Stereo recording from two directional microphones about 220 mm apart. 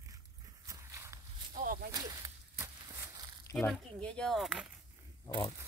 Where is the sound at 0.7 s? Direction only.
15° right (ahead or behind).